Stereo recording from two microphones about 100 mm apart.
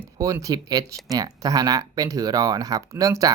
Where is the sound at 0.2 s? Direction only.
35° right (ahead or behind).